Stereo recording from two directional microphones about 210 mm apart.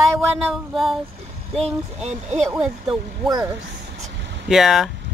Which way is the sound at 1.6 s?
30° right (ahead or behind).